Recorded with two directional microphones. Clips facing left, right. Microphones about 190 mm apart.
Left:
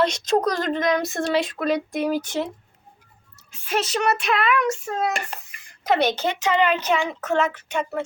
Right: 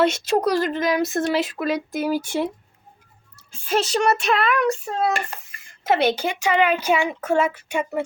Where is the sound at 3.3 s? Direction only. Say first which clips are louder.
Right 3 dB; 30° right (ahead or behind).